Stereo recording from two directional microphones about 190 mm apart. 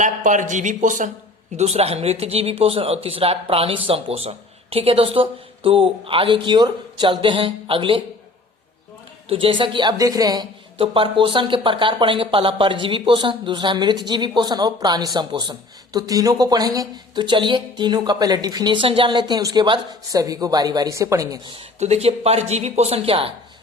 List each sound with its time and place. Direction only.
0.0 s speech: 40° right (ahead or behind)
9.3 s speech: 30° right (ahead or behind)